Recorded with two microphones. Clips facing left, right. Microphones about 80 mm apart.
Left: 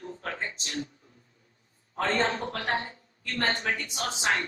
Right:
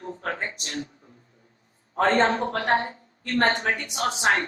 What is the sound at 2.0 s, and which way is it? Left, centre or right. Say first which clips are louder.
Speech: right 7 dB; right.